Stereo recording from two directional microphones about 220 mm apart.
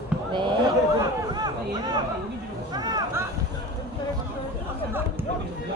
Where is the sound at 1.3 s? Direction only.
20° right (ahead or behind).